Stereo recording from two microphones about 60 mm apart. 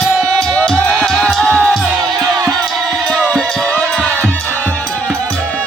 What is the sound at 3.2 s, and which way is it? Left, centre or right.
Music, centre.